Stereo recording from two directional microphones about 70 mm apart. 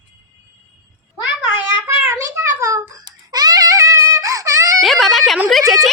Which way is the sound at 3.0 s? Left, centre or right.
Right.